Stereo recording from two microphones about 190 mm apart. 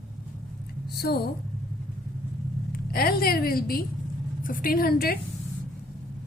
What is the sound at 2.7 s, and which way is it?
A woman's voice, 50° left (ahead or behind).